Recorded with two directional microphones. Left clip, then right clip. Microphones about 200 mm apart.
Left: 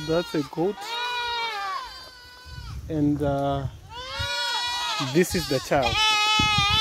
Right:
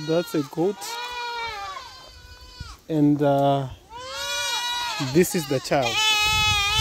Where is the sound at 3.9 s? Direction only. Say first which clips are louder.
Left 1 dB; 55° left (ahead or behind).